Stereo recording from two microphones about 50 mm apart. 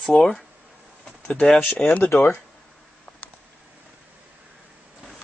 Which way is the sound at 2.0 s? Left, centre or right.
Left.